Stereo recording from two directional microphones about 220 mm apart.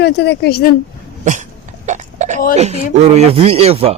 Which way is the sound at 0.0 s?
50° left (ahead or behind).